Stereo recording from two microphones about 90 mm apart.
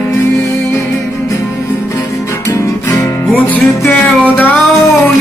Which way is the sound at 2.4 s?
35° left (ahead or behind).